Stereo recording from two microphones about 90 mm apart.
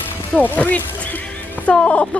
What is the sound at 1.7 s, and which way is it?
Music, 15° left (ahead or behind).